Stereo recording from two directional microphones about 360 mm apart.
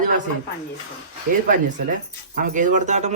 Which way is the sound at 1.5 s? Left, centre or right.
Right.